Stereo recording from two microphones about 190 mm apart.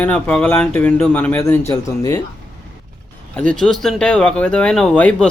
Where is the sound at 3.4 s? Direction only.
5° left (ahead or behind).